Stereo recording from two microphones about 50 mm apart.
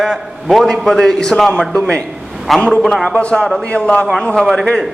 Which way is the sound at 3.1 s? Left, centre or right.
Left.